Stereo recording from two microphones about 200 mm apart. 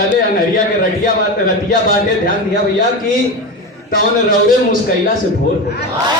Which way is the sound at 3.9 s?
45° left (ahead or behind).